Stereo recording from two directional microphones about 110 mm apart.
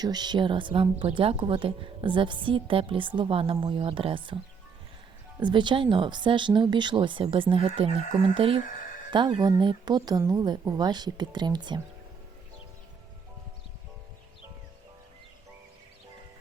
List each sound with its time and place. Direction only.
0.0 s a woman's voice: 40° right (ahead or behind)
5.4 s a woman's voice: 45° right (ahead or behind)